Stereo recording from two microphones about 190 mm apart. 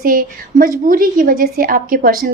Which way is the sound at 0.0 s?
50° right (ahead or behind).